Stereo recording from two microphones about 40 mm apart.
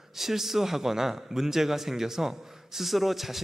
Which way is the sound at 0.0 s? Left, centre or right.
Centre.